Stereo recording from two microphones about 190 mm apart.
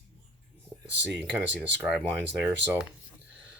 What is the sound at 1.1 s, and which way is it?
Speech, 10° right (ahead or behind).